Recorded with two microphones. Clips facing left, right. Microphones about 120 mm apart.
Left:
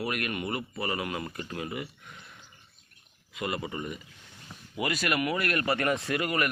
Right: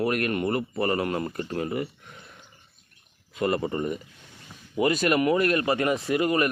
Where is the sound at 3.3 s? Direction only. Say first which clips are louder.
Right 8 dB; 35° right (ahead or behind).